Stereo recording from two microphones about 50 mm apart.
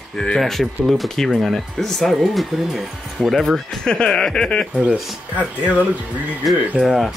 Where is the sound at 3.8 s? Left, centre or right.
Centre.